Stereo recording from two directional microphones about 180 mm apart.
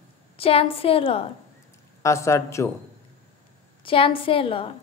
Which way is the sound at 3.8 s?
30° left (ahead or behind).